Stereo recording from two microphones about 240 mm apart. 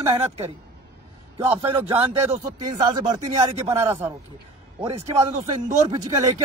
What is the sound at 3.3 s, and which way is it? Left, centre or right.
Speech, centre.